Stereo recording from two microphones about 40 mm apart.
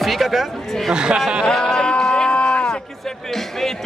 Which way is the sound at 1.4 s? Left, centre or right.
Centre.